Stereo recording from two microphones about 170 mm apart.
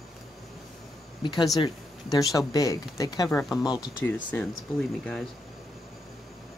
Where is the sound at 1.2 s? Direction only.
25° left (ahead or behind).